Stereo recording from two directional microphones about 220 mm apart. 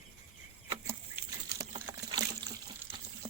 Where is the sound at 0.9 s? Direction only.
10° right (ahead or behind).